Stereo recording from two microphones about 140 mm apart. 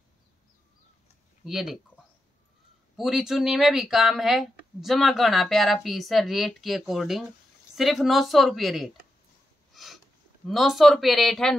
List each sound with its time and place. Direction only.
1.4 s speech: centre (ahead or behind)
3.0 s speech: 5° right (ahead or behind)